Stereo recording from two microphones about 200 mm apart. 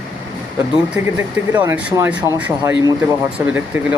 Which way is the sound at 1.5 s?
10° right (ahead or behind).